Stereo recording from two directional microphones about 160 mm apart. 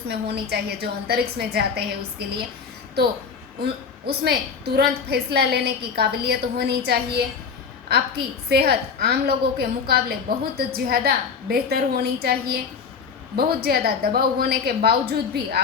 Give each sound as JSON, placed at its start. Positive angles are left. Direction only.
{"t": 0.1, "sound": "a woman's voice", "side_deg": -90}
{"t": 4.0, "sound": "a woman's voice", "side_deg": -90}